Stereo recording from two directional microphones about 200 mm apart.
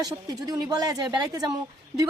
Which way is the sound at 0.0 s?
20° right (ahead or behind).